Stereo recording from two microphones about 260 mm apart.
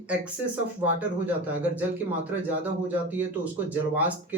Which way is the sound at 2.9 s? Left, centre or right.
Centre.